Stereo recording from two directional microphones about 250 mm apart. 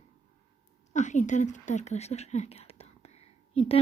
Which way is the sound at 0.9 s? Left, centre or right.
Left.